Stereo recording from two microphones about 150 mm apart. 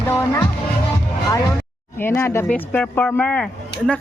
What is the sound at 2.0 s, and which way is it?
Speech, 15° left (ahead or behind).